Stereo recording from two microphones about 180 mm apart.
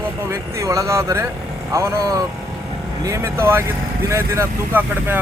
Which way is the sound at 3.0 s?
15° right (ahead or behind).